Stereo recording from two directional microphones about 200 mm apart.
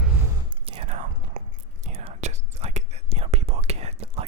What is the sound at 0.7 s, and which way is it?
Whispering, 30° right (ahead or behind).